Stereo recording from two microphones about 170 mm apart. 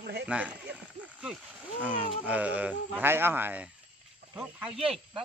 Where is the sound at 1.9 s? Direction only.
5° right (ahead or behind).